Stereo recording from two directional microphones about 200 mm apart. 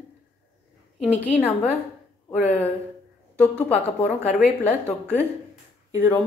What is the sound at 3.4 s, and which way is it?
Speech, 5° left (ahead or behind).